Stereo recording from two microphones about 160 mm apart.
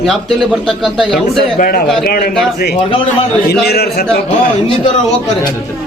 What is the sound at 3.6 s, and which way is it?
Speech, 75° left (ahead or behind).